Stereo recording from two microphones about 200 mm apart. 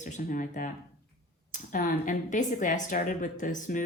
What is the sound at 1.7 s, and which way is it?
Speech, 40° left (ahead or behind).